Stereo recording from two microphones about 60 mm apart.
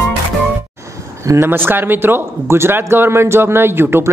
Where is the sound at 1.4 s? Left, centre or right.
Right.